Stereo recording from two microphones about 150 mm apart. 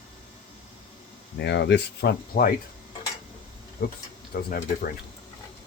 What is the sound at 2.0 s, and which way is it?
Speech, 90° left.